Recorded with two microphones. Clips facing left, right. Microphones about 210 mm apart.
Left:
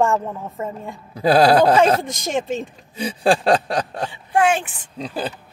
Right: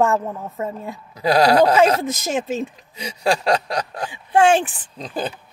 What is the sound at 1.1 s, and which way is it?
Speech, 30° left (ahead or behind).